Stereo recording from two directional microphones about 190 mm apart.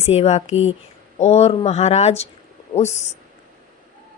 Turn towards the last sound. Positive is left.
turn(degrees=35)  # may be behind; listen again after turning